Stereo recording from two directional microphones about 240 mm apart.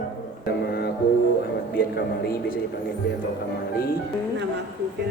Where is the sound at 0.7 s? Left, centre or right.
Left.